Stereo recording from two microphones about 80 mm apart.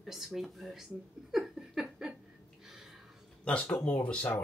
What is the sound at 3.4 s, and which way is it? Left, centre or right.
Speech, centre.